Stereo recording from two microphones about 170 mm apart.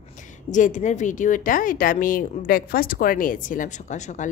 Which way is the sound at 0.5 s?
45° left (ahead or behind).